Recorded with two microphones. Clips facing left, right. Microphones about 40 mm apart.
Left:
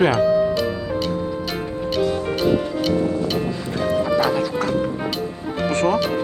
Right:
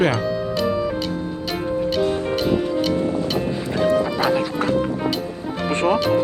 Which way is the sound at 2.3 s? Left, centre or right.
Centre.